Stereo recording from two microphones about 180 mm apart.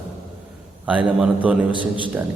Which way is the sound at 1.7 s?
25° right (ahead or behind).